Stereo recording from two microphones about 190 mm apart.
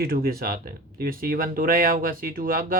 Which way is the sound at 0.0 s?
55° right (ahead or behind).